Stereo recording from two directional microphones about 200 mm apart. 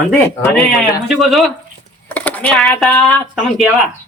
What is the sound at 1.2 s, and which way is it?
Speech, centre (ahead or behind).